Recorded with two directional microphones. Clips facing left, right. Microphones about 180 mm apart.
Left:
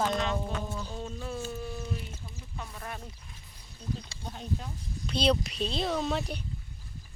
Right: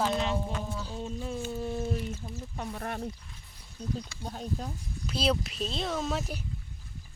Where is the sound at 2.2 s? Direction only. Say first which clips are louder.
Right 6 dB; 45° right (ahead or behind).